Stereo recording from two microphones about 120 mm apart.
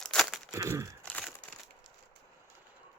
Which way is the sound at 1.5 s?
15° left (ahead or behind).